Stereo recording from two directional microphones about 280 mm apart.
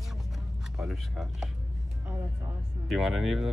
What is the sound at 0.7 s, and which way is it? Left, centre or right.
Speech, centre.